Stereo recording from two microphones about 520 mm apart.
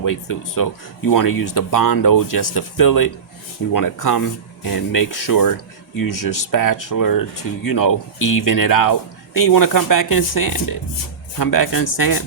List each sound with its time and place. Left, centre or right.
0.0 s speech: left